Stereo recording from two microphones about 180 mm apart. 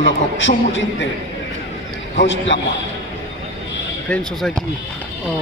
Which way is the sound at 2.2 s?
90° left.